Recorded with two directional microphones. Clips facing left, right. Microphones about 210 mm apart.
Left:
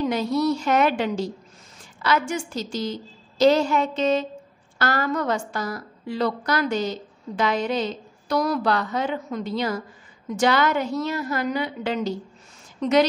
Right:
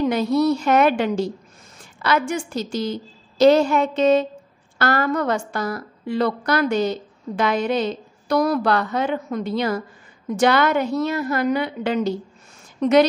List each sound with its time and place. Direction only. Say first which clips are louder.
0.1 s a woman's voice: right 4 dB; 60° right (ahead or behind)